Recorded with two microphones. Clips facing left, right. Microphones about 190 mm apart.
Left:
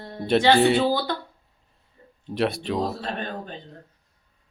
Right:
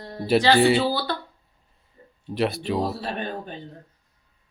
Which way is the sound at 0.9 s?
15° left (ahead or behind).